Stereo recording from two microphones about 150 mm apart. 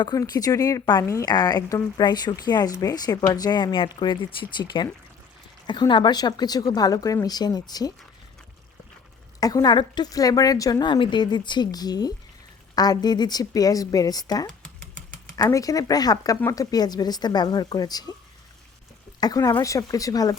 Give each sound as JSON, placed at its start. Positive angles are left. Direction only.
{"t": 0.0, "sound": "speech", "side_deg": 25}
{"t": 9.4, "sound": "speech", "side_deg": 25}
{"t": 19.2, "sound": "speech", "side_deg": 25}